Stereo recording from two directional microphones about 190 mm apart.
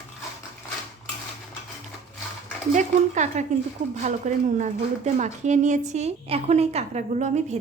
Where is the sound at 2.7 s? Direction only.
40° right (ahead or behind).